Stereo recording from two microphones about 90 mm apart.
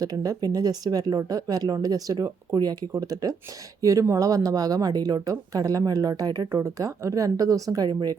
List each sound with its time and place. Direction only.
0.0 s speech: 40° right (ahead or behind)
6.5 s speech: 35° right (ahead or behind)